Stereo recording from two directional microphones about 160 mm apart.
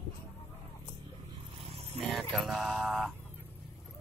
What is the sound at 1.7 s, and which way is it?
Vehicle, 40° right (ahead or behind).